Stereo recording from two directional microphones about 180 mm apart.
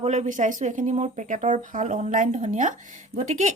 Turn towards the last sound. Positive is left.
turn(degrees=-40)  # may be behind; listen again after turning